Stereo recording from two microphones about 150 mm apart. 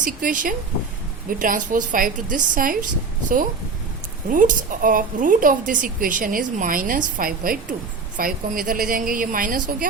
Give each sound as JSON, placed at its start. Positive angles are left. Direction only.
{"t": 0.0, "sound": "a woman's voice", "side_deg": -65}
{"t": 4.3, "sound": "a woman's voice", "side_deg": -60}